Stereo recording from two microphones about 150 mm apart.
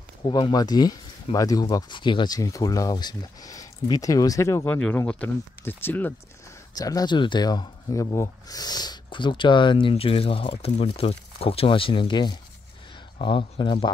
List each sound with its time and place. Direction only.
0.2 s speech: 30° left (ahead or behind)
4.7 s speech: 5° left (ahead or behind)
6.8 s speech: 25° left (ahead or behind)